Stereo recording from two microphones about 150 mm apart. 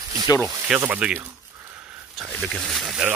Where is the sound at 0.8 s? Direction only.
10° right (ahead or behind).